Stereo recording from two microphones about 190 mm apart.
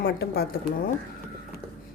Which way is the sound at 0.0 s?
60° left (ahead or behind).